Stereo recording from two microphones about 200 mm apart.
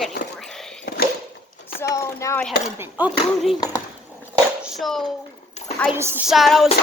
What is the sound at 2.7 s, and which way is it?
Speech, 10° right (ahead or behind).